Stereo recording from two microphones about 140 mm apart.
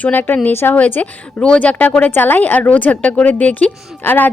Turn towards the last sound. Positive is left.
turn(degrees=15)  # may be behind; listen again after turning